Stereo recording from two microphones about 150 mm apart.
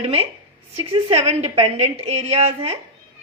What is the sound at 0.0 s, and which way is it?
A woman's voice, 40° right (ahead or behind).